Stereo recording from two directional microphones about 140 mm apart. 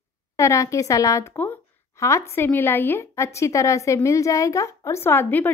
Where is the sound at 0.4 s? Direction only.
20° left (ahead or behind).